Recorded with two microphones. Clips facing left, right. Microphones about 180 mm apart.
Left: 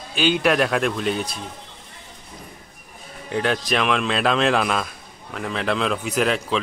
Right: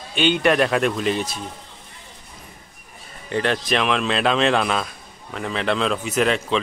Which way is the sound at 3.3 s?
Centre (ahead or behind).